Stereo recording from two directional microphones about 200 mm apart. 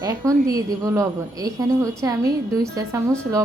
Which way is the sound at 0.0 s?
15° right (ahead or behind).